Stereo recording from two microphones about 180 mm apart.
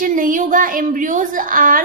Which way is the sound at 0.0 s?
50° right (ahead or behind).